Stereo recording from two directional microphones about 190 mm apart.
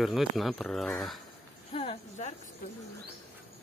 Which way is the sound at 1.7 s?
30° left (ahead or behind).